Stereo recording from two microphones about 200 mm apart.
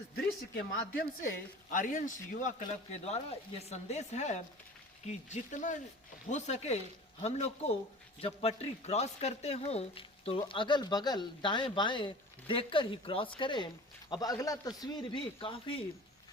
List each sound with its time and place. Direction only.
0.5 s speech: 75° left (ahead or behind)
1.7 s speech: 40° left (ahead or behind)